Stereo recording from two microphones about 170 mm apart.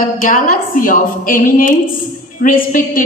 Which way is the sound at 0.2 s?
55° left (ahead or behind).